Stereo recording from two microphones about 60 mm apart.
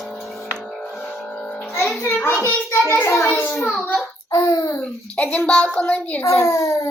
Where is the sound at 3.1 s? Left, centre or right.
Left.